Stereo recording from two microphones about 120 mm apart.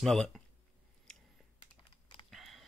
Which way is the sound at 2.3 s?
Centre (ahead or behind).